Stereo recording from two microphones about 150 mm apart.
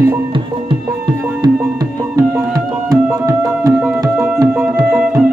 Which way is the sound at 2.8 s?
20° right (ahead or behind).